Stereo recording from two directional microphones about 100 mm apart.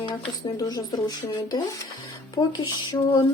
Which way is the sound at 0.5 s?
35° left (ahead or behind).